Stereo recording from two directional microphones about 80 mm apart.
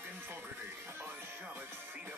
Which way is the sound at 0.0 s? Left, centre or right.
Right.